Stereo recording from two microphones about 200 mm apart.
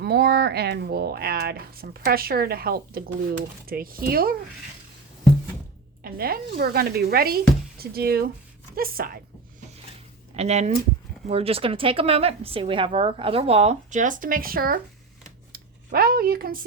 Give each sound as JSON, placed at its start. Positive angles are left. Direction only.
{"t": 0.0, "sound": "speech", "side_deg": -50}
{"t": 6.0, "sound": "speech", "side_deg": -50}
{"t": 10.3, "sound": "a woman's voice", "side_deg": -35}
{"t": 15.5, "sound": "a sound", "side_deg": -50}